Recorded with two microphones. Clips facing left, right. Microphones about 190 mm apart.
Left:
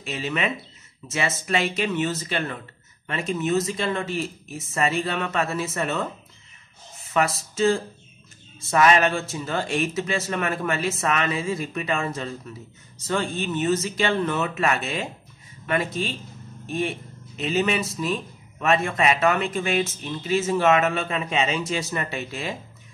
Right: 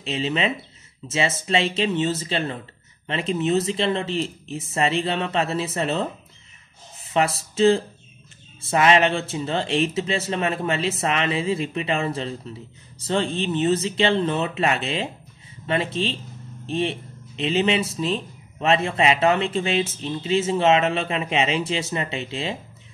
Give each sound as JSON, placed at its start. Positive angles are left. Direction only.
{"t": 0.0, "sound": "a man's voice", "side_deg": -25}
{"t": 7.2, "sound": "a man's voice", "side_deg": -30}